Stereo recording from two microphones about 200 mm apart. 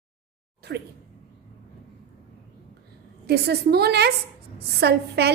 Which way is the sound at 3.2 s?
55° right (ahead or behind).